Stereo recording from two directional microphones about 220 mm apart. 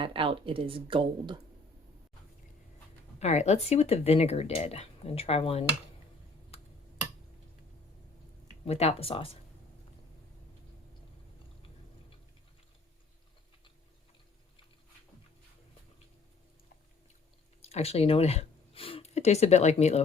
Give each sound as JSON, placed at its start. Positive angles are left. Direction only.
{"t": 0.0, "sound": "speech", "side_deg": -25}
{"t": 3.2, "sound": "speech", "side_deg": 30}
{"t": 6.5, "sound": "tick-tock", "side_deg": 30}
{"t": 8.6, "sound": "speech", "side_deg": 30}
{"t": 17.6, "sound": "speech", "side_deg": 30}